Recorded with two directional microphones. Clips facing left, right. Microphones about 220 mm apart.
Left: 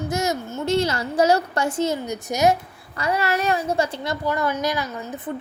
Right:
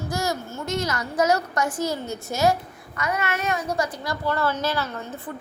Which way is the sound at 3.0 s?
30° left (ahead or behind).